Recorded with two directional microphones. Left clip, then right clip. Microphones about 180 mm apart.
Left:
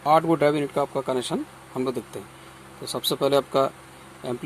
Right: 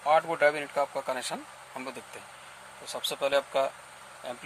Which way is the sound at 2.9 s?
45° left (ahead or behind).